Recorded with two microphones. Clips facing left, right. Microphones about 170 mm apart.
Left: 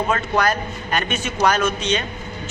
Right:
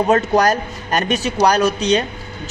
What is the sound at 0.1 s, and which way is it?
A man's voice, 40° right (ahead or behind).